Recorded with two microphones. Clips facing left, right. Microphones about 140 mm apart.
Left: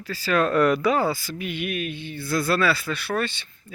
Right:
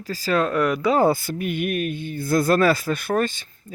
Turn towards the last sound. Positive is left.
turn(degrees=-45)  # may be behind; listen again after turning